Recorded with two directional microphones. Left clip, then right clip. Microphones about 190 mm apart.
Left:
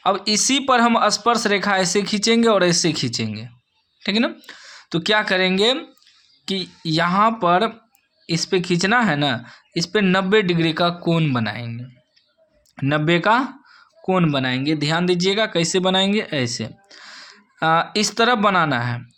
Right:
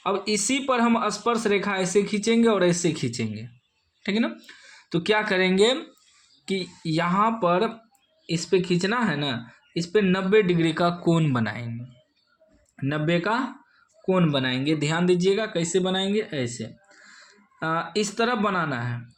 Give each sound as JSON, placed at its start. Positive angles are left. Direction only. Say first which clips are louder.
{"t": 0.0, "sound": "speech", "louder": "left 6 dB", "side_deg": 30}
{"t": 6.4, "sound": "speech", "louder": "left 4 dB", "side_deg": 20}
{"t": 12.7, "sound": "speech", "louder": "left 6 dB", "side_deg": 40}
{"t": 14.1, "sound": "speech", "louder": "left 4 dB", "side_deg": 25}